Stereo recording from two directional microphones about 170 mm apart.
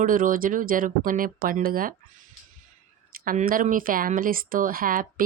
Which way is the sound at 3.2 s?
55° right (ahead or behind).